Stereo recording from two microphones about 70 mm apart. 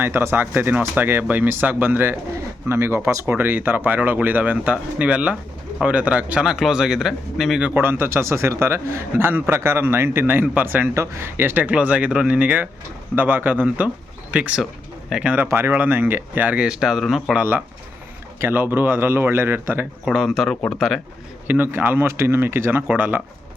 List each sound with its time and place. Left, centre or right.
0.0 s a man's voice: right
3.2 s speech: right
6.5 s speech: centre
7.6 s a man's voice: right
10.9 s speech: right; by 15.4 s centre
15.4 s a man's voice: right
16.6 s speech: centre
17.0 s speech: centre
18.3 s a man's voice: right
20.1 s speech: centre
20.6 s speech: centre
21.4 s a man's voice: right